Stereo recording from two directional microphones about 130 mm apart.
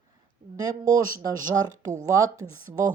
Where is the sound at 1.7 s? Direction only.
75° right (ahead or behind).